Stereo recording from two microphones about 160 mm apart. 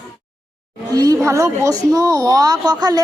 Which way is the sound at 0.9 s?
20° right (ahead or behind).